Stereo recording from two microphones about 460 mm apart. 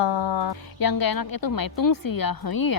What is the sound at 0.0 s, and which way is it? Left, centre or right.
A woman's voice, left.